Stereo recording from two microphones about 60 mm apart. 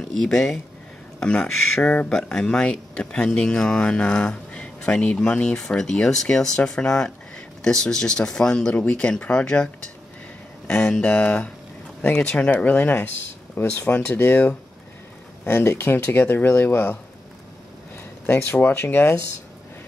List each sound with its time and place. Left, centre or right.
0.1 s speech: centre
1.9 s speech: left
2.1 s speech: centre
10.7 s speech: centre
12.5 s speech: left
18.2 s speech: left